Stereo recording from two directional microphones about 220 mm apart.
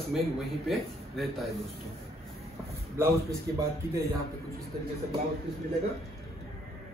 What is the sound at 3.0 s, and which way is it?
Speech, 10° right (ahead or behind).